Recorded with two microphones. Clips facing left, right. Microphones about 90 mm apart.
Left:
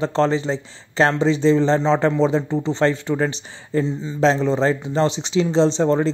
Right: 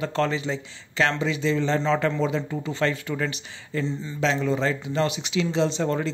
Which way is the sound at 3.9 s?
20° left (ahead or behind).